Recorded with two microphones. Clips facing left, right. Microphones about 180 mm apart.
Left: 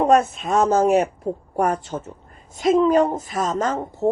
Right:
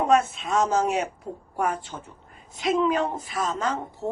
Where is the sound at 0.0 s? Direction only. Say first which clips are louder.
Left 4 dB; 40° left (ahead or behind).